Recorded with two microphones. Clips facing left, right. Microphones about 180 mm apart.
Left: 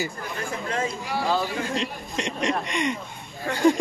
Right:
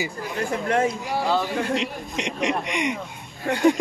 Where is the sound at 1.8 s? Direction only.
15° right (ahead or behind).